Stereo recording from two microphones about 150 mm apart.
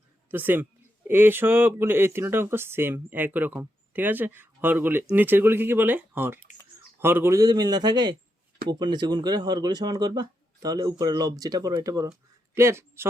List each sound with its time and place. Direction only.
0.3 s a man's voice: 15° right (ahead or behind)